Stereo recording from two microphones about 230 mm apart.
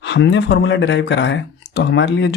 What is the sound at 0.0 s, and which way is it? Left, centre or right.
Speech, left.